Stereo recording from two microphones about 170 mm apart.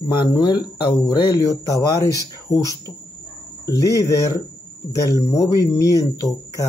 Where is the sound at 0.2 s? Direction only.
25° left (ahead or behind).